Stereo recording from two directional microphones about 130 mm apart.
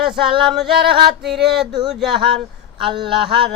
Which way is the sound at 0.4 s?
Centre (ahead or behind).